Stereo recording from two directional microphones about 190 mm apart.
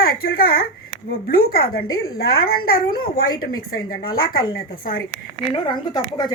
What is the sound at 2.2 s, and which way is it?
A woman's voice, 55° left (ahead or behind).